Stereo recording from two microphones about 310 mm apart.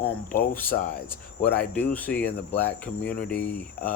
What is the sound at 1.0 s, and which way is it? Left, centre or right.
Cricket, centre.